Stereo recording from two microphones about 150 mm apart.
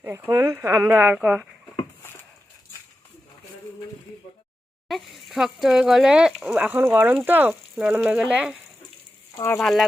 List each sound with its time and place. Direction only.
0.0 s speech: 20° right (ahead or behind)
4.9 s speech: centre (ahead or behind)
9.6 s speech: centre (ahead or behind)